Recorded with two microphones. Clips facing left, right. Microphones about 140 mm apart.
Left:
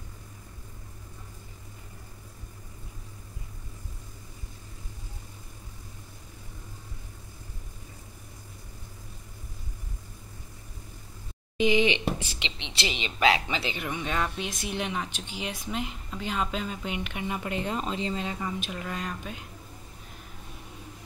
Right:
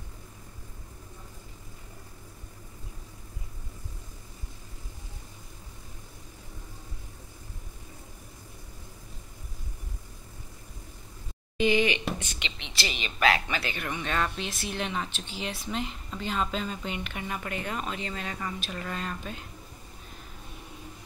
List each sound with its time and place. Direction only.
11.5 s a sound: 15° left (ahead or behind)
12.0 s speech: 30° left (ahead or behind)
13.8 s speech: 10° left (ahead or behind)